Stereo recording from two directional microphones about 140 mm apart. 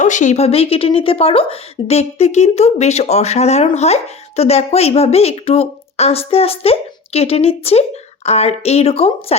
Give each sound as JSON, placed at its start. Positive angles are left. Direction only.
{"t": 0.0, "sound": "speech", "side_deg": 60}